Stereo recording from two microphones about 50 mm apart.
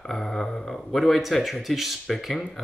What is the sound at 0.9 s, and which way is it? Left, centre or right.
Speech, centre.